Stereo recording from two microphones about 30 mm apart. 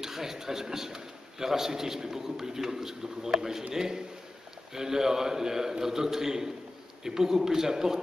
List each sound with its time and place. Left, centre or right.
0.0 s a man's voice: centre